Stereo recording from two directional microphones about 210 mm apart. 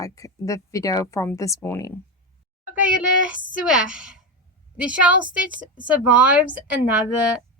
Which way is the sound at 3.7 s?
5° right (ahead or behind).